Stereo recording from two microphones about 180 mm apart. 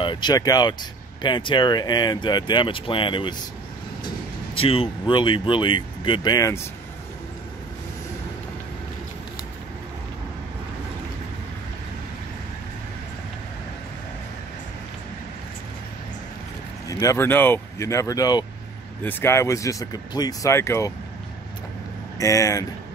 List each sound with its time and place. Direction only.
0.0 s speech: 25° left (ahead or behind)
4.6 s speech: 30° left (ahead or behind)
16.9 s speech: 15° left (ahead or behind)
22.2 s speech: 20° left (ahead or behind)